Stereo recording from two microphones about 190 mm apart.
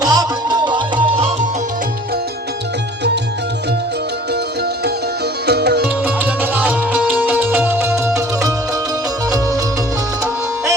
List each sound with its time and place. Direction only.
0.0 s music: 20° right (ahead or behind)
5.5 s music: 60° right (ahead or behind)
6.2 s music: 10° right (ahead or behind)